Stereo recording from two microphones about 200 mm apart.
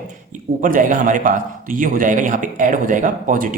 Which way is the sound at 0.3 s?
40° right (ahead or behind).